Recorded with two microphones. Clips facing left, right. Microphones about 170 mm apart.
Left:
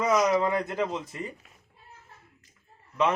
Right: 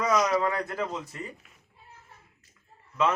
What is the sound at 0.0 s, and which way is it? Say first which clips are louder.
Speech: left 1 dB; 25° left (ahead or behind).